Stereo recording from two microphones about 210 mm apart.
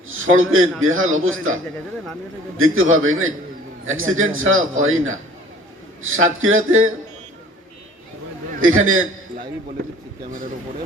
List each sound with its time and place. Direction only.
0.1 s a man's voice: 70° right (ahead or behind)
2.6 s a man's voice: 75° right (ahead or behind)
8.6 s a man's voice: 75° right (ahead or behind)